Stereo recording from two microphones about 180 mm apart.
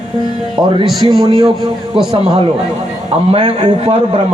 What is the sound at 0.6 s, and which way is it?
A man's voice, 25° right (ahead or behind).